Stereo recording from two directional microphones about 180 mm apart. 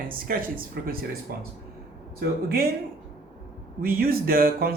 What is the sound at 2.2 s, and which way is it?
Speech, 60° right (ahead or behind).